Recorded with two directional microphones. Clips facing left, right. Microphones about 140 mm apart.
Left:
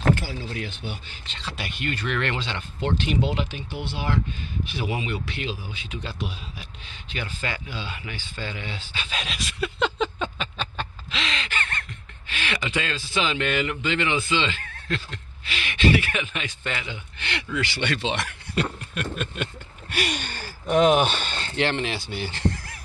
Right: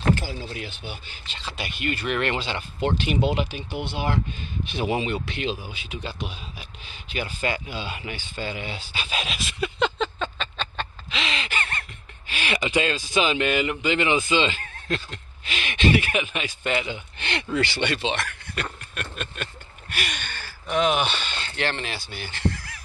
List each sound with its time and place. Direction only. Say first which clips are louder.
0.7 s a man's voice: left 2 dB; 5° right (ahead or behind); by 5.7 s 20° right (ahead or behind)
5.7 s a man's voice: right 1 dB; 10° right (ahead or behind); by 11.1 s 10° left (ahead or behind)
11.1 s gasp: right 1 dB; 10° right (ahead or behind)
12.3 s a man's voice: right 3 dB; 15° right (ahead or behind); by 17.8 s 30° right (ahead or behind)
18.1 s a man's voice: left 3 dB; 25° left (ahead or behind)
18.9 s a sound: left 4 dB; 10° left (ahead or behind)
19.9 s a sound: left 5 dB; 30° left (ahead or behind)
20.7 s speech: left 4 dB; 45° left (ahead or behind)
21.5 s speech: left 4 dB; 20° left (ahead or behind)